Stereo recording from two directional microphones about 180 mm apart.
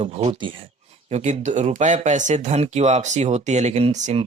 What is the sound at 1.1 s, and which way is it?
Speech, 40° right (ahead or behind).